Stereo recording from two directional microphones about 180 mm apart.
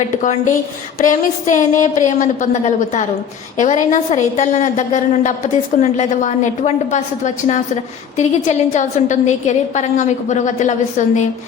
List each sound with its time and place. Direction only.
0.9 s a woman's voice: 45° left (ahead or behind)